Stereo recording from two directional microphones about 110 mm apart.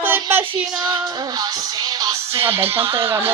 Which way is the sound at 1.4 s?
35° right (ahead or behind).